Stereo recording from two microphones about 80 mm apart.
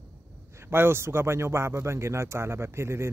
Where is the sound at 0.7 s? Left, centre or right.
Right.